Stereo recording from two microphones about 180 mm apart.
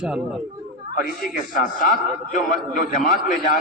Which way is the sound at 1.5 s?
45° left (ahead or behind).